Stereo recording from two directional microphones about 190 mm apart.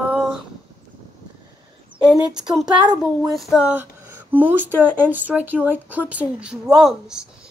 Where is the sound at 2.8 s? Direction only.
20° right (ahead or behind).